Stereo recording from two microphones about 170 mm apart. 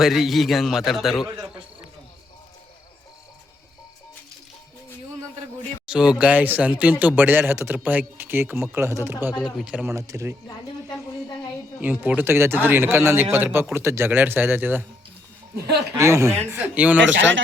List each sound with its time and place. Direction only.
0.0 s a man's voice: centre (ahead or behind)
5.8 s speech: 5° right (ahead or behind)
10.8 s a sound: 25° left (ahead or behind)
11.8 s speech: 10° right (ahead or behind)
15.5 s speech: 70° right (ahead or behind)
16.0 s speech: 15° right (ahead or behind)
17.2 s speech: 90° right